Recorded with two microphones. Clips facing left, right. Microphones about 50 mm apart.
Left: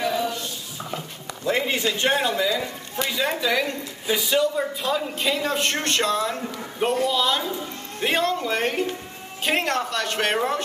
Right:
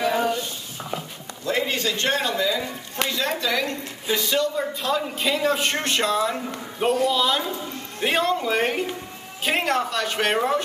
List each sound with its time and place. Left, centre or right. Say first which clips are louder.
1.4 s a man's voice: left 1 dB; centre